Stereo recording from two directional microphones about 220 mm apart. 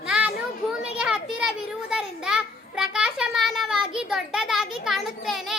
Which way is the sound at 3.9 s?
Centre (ahead or behind).